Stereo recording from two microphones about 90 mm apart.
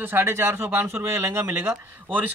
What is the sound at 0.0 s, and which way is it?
Speech, 25° right (ahead or behind).